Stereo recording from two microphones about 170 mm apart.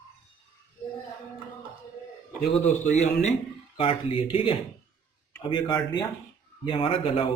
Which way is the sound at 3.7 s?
35° left (ahead or behind).